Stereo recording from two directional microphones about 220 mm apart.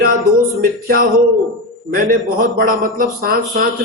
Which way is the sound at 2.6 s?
40° right (ahead or behind).